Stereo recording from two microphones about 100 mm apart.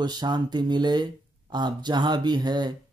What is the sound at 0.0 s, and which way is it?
Speech, 45° right (ahead or behind).